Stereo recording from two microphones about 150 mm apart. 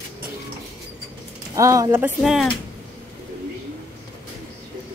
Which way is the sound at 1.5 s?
20° right (ahead or behind).